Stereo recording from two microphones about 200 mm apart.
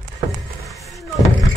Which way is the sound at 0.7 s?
Centre (ahead or behind).